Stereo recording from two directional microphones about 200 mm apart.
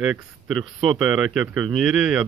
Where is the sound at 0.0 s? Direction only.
Centre (ahead or behind).